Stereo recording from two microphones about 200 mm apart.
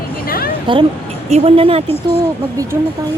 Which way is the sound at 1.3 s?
30° right (ahead or behind).